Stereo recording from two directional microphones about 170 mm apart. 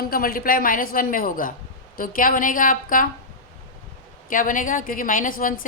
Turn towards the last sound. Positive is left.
turn(degrees=50)  # may be behind; listen again after turning